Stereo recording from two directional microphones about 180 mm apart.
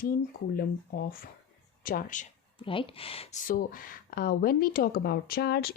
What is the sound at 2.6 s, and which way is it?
Speech, 30° left (ahead or behind).